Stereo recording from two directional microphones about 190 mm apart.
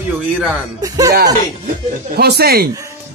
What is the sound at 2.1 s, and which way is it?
Speech, 55° right (ahead or behind).